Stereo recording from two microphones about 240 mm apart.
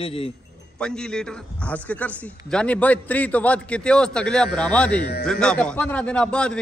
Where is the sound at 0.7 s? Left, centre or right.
Centre.